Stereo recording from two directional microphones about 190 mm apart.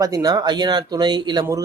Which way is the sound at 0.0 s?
20° right (ahead or behind).